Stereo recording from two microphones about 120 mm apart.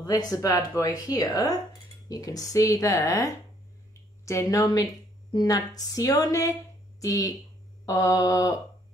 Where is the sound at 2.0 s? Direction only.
30° left (ahead or behind).